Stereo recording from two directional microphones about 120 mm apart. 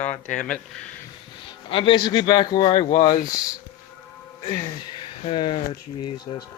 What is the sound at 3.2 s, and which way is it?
Speech, 30° left (ahead or behind).